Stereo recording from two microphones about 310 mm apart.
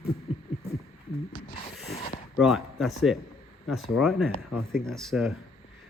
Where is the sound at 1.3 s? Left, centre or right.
Left.